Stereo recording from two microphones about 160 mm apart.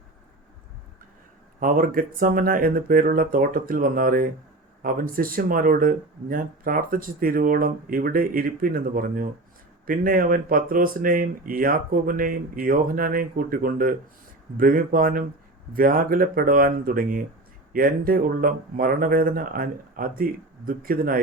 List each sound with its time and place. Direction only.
1.5 s speech: 60° right (ahead or behind)